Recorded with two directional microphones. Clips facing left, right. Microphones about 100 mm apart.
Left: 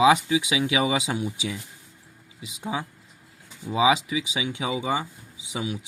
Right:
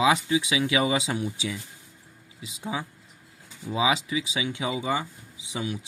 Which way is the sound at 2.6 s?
15° left (ahead or behind).